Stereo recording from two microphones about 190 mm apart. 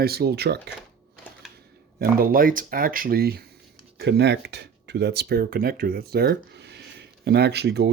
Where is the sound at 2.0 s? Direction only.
50° right (ahead or behind).